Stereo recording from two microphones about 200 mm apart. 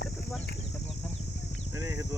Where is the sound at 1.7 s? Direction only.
15° right (ahead or behind).